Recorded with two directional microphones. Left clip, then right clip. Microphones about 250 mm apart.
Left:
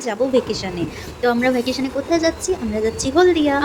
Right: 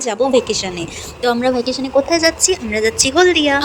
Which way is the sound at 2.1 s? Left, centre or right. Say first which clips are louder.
Right 4 dB; right.